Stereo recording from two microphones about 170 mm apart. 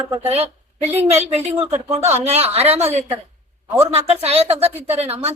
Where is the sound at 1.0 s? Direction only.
40° right (ahead or behind).